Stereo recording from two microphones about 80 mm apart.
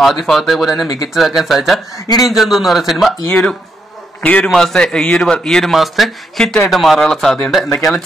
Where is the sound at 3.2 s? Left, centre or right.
Centre.